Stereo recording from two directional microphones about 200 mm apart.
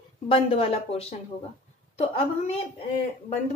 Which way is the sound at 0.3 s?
30° left (ahead or behind).